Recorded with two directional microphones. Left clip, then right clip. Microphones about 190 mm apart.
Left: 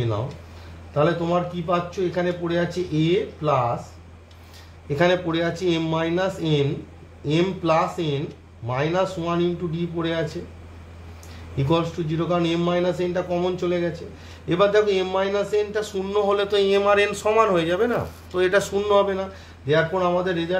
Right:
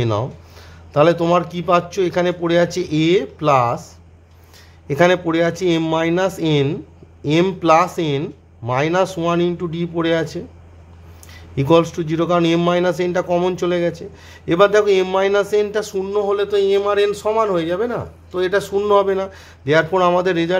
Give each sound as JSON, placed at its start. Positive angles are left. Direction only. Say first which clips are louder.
{"t": 0.9, "sound": "a man's voice", "louder": "right 7 dB", "side_deg": -45}
{"t": 4.8, "sound": "a man's voice", "louder": "right 5 dB", "side_deg": -35}
{"t": 11.5, "sound": "a man's voice", "louder": "right 8 dB", "side_deg": -40}